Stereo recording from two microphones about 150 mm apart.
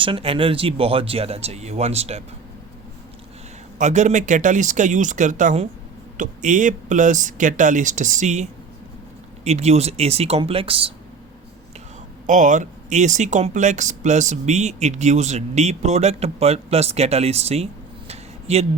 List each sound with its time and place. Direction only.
0.0 s speech: 35° right (ahead or behind)
3.8 s speech: 50° right (ahead or behind)
12.2 s speech: 60° right (ahead or behind)
18.1 s a sound: 45° right (ahead or behind)